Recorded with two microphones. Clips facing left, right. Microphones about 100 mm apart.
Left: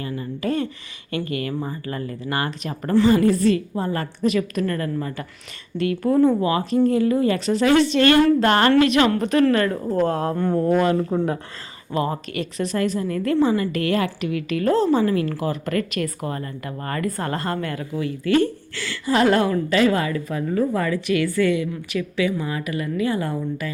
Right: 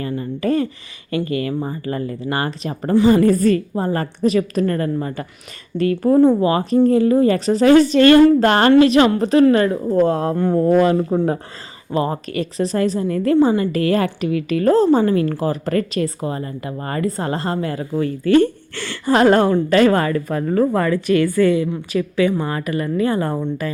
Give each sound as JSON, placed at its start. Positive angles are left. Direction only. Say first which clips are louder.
{"t": 0.0, "sound": "a woman's voice", "louder": "right 5 dB", "side_deg": -35}
{"t": 3.2, "sound": "a woman's voice", "louder": "right 3 dB", "side_deg": -45}
{"t": 18.0, "sound": "a woman's voice", "louder": "right 5 dB", "side_deg": -40}
{"t": 19.7, "sound": "a woman's voice", "louder": "right 5 dB", "side_deg": -50}